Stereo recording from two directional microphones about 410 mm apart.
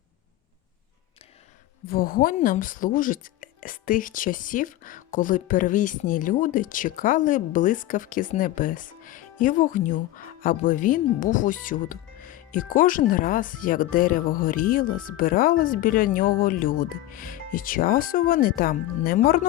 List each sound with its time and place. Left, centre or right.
1.9 s speech: left